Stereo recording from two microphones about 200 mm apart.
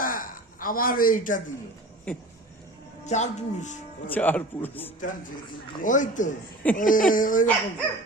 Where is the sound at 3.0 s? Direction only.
35° left (ahead or behind).